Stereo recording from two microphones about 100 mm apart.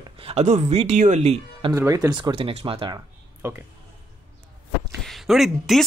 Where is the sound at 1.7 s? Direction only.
30° right (ahead or behind).